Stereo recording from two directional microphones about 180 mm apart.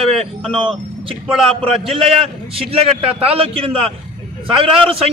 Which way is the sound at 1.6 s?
30° right (ahead or behind).